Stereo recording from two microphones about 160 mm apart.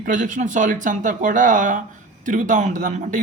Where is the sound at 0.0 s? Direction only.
55° right (ahead or behind).